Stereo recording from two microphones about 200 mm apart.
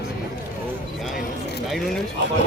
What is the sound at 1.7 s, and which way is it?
Speech, centre (ahead or behind).